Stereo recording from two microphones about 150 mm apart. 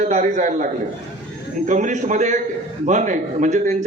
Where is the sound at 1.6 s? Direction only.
55° right (ahead or behind).